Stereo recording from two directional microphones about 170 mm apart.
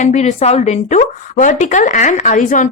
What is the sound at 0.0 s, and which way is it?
A woman's voice, 40° left (ahead or behind).